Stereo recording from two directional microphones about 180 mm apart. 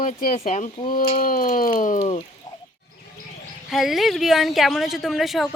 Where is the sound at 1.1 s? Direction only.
50° left (ahead or behind).